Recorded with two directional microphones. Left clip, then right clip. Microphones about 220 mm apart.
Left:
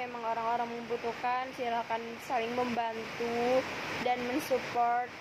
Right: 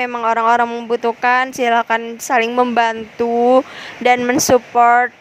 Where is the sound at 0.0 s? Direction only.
50° right (ahead or behind).